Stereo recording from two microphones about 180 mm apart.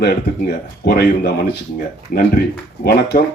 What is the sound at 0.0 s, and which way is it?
A man's voice, 65° left (ahead or behind).